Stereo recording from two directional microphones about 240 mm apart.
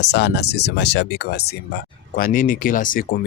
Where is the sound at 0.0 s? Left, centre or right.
Left.